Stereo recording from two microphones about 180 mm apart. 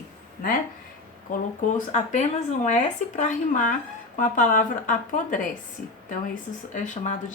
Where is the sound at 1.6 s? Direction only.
45° left (ahead or behind).